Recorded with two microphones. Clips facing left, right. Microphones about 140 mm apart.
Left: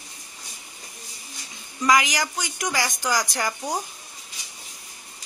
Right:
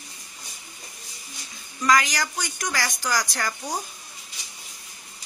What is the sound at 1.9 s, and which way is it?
A woman's voice, 15° left (ahead or behind).